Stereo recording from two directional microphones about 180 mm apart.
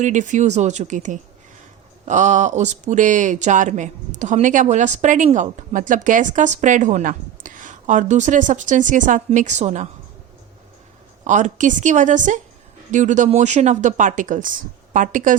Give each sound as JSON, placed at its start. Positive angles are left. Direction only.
{"t": 0.0, "sound": "speech", "side_deg": -45}
{"t": 11.3, "sound": "speech", "side_deg": -45}